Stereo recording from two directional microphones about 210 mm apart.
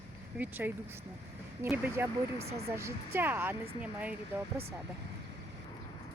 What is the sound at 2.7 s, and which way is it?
Speech, 10° right (ahead or behind).